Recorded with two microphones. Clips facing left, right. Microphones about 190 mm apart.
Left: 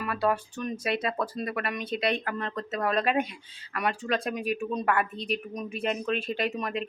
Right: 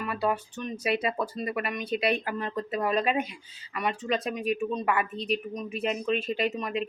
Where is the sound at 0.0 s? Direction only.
Centre (ahead or behind).